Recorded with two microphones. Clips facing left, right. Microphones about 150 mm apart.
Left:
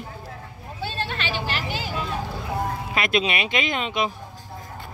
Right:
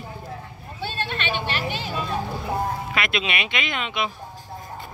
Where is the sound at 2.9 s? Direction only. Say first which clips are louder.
Left 3 dB; 40° left (ahead or behind).